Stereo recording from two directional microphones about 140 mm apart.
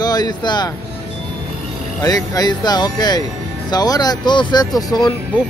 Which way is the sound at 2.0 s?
25° left (ahead or behind).